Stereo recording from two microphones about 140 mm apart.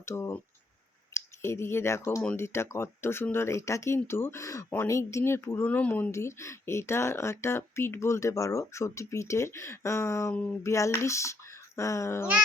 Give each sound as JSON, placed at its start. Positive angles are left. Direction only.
{"t": 0.0, "sound": "speech", "side_deg": 20}